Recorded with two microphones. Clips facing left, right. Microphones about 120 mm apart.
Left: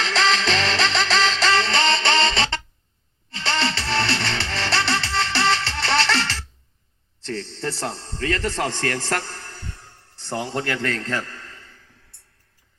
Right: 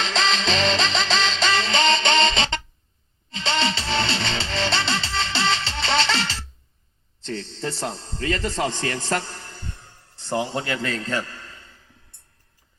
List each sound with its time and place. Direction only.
0.0 s music: 20° right (ahead or behind)
7.6 s a man's voice: 20° right (ahead or behind)